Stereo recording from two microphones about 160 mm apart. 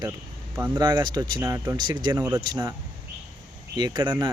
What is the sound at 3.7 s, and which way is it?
Speech, 25° right (ahead or behind).